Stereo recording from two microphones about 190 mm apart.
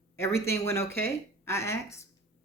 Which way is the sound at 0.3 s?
15° left (ahead or behind).